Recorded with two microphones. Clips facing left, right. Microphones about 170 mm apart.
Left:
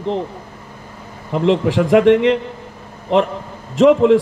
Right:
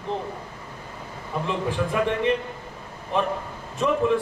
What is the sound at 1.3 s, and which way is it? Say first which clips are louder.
A man's voice: left 11 dB; 90° left.